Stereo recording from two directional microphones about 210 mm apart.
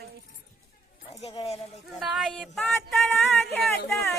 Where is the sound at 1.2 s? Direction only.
30° left (ahead or behind).